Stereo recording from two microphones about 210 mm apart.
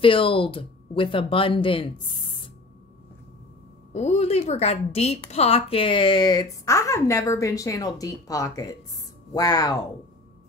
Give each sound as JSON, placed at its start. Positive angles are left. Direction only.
{"t": 0.0, "sound": "speech", "side_deg": 25}
{"t": 3.9, "sound": "a woman's voice", "side_deg": 30}